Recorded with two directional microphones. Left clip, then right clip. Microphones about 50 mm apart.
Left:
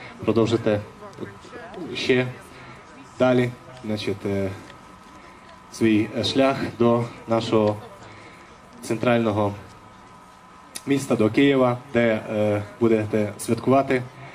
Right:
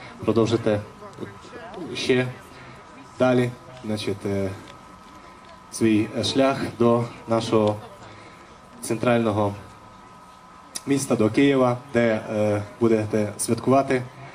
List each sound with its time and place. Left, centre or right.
0.0 s speech: left
5.7 s speech: left
8.8 s speech: left
10.7 s speech: left